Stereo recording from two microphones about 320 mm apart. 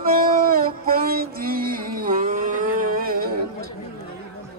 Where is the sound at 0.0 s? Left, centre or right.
Right.